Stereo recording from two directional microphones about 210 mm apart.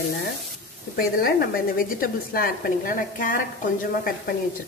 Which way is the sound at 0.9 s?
45° left (ahead or behind).